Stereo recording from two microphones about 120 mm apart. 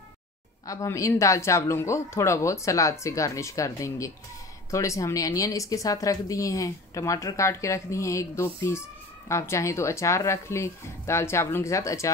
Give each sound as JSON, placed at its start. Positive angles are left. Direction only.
{"t": 0.7, "sound": "speech", "side_deg": 25}